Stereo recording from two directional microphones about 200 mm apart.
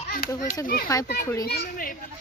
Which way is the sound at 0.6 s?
45° left (ahead or behind).